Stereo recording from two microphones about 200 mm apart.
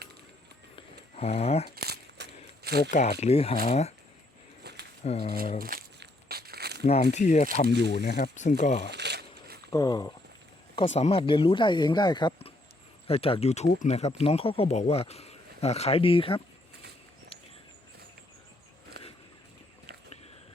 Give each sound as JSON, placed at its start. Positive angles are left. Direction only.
{"t": 1.1, "sound": "speech", "side_deg": 30}
{"t": 1.7, "sound": "a sound", "side_deg": -50}
{"t": 2.9, "sound": "speech", "side_deg": 35}
{"t": 5.0, "sound": "speech", "side_deg": 30}
{"t": 5.5, "sound": "crumpling", "side_deg": -45}
{"t": 6.8, "sound": "speech", "side_deg": 30}
{"t": 7.7, "sound": "speech", "side_deg": -60}
{"t": 8.4, "sound": "speech", "side_deg": 35}
{"t": 8.9, "sound": "a sound", "side_deg": -55}
{"t": 9.7, "sound": "speech", "side_deg": 15}
{"t": 10.8, "sound": "speech", "side_deg": 35}
{"t": 19.0, "sound": "a sound", "side_deg": -55}